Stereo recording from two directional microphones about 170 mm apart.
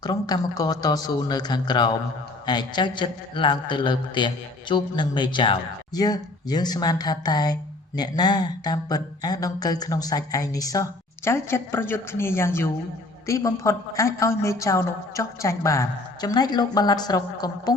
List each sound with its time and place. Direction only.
0.0 s a woman's voice: 25° left (ahead or behind)